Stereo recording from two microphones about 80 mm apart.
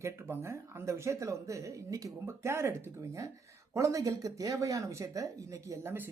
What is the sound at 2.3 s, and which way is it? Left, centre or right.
Speech, right.